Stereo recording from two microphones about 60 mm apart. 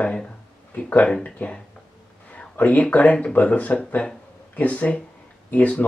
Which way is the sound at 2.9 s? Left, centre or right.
Left.